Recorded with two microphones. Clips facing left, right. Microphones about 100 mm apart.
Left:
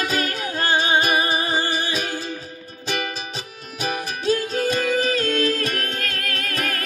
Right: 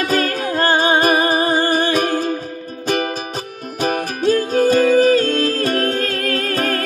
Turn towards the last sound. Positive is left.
turn(degrees=-35)  # may be behind; listen again after turning